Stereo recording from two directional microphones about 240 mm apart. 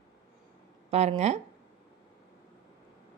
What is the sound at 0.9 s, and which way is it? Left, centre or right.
Speech, right.